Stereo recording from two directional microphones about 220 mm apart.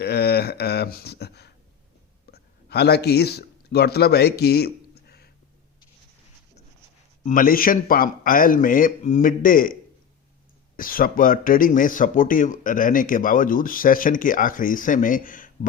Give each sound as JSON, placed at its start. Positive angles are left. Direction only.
{"t": 0.0, "sound": "a sound", "side_deg": 45}
{"t": 2.3, "sound": "speech", "side_deg": 45}
{"t": 7.3, "sound": "speech", "side_deg": 40}
{"t": 10.8, "sound": "speech", "side_deg": 40}